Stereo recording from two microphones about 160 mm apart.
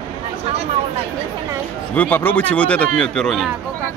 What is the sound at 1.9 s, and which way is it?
Speech, 10° left (ahead or behind).